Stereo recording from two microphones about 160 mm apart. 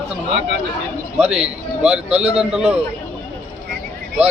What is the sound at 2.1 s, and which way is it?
Speech, 40° right (ahead or behind).